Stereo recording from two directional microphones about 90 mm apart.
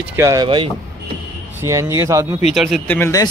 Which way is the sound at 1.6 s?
35° right (ahead or behind).